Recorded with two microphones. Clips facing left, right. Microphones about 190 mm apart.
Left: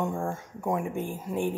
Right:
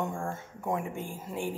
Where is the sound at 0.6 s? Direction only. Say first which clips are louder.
Left 4 dB; 20° left (ahead or behind).